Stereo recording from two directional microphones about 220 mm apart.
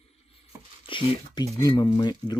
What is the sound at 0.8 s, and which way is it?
Speech, 20° left (ahead or behind).